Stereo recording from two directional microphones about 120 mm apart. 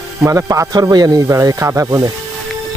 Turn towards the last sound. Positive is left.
turn(degrees=-25)  # may be behind; listen again after turning